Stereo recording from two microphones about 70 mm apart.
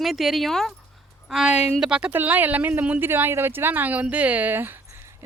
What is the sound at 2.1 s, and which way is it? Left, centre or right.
Speech, right.